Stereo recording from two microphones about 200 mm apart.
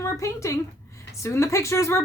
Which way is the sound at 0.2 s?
15° left (ahead or behind).